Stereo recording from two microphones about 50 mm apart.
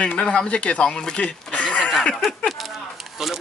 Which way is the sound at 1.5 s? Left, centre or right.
Left.